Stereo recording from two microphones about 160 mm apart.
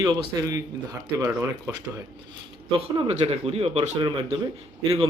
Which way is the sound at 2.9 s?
35° right (ahead or behind).